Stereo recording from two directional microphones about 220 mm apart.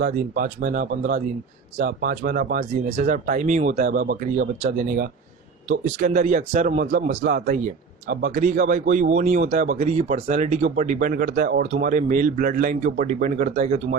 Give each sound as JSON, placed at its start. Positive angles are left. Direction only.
{"t": 0.0, "sound": "speech", "side_deg": -40}